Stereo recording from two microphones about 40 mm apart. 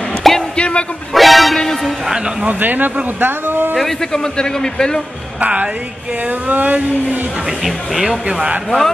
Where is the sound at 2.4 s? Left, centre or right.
Right.